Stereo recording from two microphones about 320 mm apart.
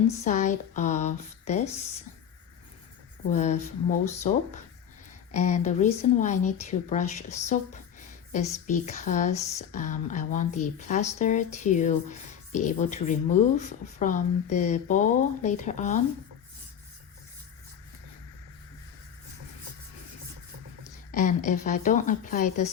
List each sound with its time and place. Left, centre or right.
0.2 s speech: left
3.3 s speech: left
21.1 s speech: left